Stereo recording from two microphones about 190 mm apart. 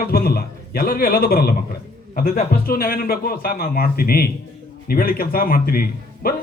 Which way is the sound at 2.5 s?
50° left (ahead or behind).